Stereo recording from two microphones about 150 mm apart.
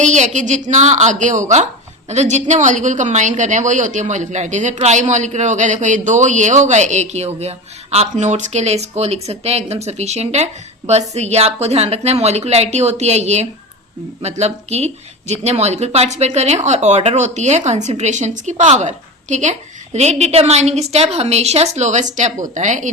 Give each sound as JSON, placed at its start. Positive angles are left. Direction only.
{"t": 0.0, "sound": "a woman's voice", "side_deg": -55}